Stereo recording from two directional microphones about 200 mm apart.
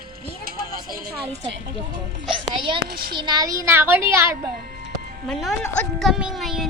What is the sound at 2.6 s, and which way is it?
Speech, 25° right (ahead or behind).